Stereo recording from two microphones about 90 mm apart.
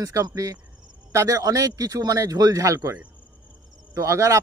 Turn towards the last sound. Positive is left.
turn(degrees=-35)  # may be behind; listen again after turning